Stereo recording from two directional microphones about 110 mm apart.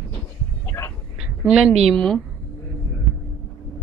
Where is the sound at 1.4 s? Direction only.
5° right (ahead or behind).